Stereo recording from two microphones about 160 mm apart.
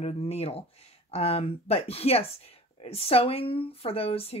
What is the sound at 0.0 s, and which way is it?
Speech, 40° left (ahead or behind).